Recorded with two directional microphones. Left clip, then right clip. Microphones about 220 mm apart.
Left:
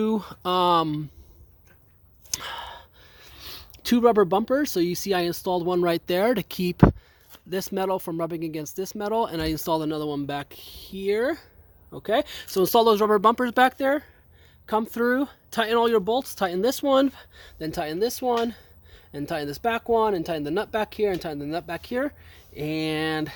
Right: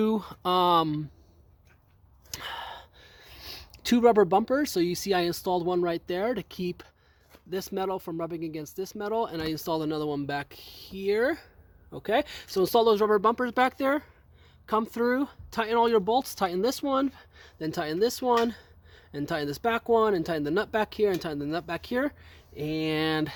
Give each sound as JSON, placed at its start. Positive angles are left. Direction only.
{"t": 0.0, "sound": "speech", "side_deg": 5}
{"t": 2.3, "sound": "speech", "side_deg": 10}
{"t": 13.7, "sound": "speech", "side_deg": 0}
{"t": 22.5, "sound": "speech", "side_deg": 10}